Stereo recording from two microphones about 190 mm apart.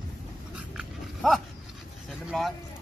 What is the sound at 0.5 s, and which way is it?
Dog, centre (ahead or behind).